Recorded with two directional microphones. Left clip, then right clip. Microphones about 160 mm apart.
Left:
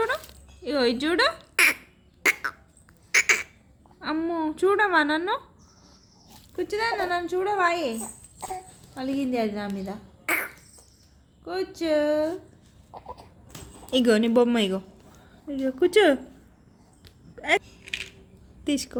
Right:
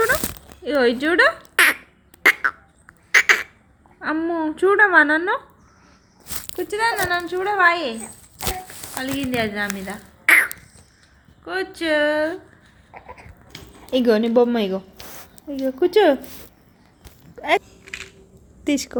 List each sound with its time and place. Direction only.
0.6 s speech: 15° left (ahead or behind)
2.2 s quack: 5° left (ahead or behind)
3.1 s a sound: 5° left (ahead or behind)
4.0 s a woman's voice: 15° left (ahead or behind)
6.6 s a woman's voice: 10° left (ahead or behind)
9.8 s throat clearing: centre (ahead or behind)
11.4 s a woman's voice: 5° left (ahead or behind)
13.5 s a sound: 10° left (ahead or behind)
13.9 s a woman's voice: 20° left (ahead or behind)
17.3 s a sound: 10° left (ahead or behind)
18.6 s a woman's voice: 10° left (ahead or behind)